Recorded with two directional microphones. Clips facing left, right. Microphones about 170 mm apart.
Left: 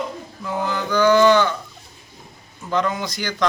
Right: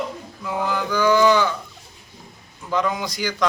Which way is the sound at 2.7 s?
5° right (ahead or behind).